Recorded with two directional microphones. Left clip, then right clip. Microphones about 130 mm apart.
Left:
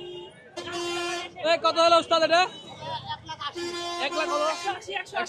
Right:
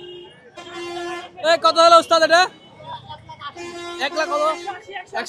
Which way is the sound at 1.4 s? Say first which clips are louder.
Right 7 dB; 30° right (ahead or behind).